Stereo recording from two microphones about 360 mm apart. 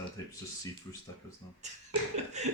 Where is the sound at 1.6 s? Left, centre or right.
Centre.